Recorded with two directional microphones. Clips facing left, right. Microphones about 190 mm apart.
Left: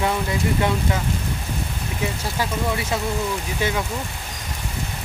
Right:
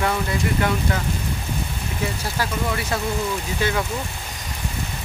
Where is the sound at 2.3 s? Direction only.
15° left (ahead or behind).